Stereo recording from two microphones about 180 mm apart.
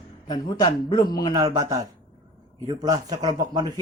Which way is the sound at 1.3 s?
20° right (ahead or behind).